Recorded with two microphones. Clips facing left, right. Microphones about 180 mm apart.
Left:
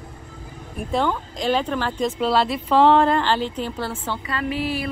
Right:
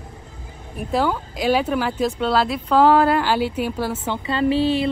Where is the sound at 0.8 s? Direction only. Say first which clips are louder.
Right 1 dB; 5° right (ahead or behind).